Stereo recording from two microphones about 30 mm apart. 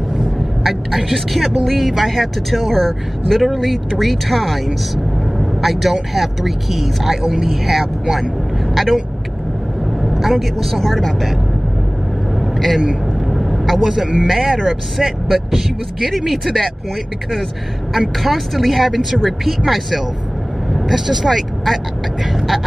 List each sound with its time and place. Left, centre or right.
0.7 s speech: centre
10.0 s speech: centre
12.5 s speech: centre
13.3 s vehicle: centre
14.3 s speech: centre
18.2 s speech: centre
21.3 s speech: centre